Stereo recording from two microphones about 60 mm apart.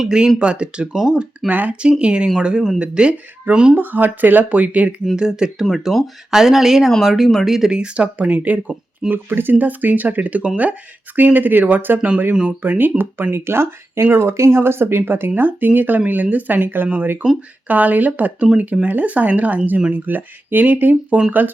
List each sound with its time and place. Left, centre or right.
0.0 s speech: centre
1.5 s speech: right
3.8 s speech: right
5.1 s speech: centre; by 12.9 s right
13.3 s speech: right